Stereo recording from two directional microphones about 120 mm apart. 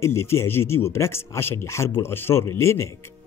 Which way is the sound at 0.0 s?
20° left (ahead or behind).